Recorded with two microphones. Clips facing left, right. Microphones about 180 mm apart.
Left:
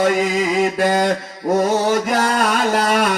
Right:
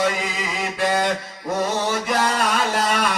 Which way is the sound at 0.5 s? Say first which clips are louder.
Left 3 dB; 45° left (ahead or behind).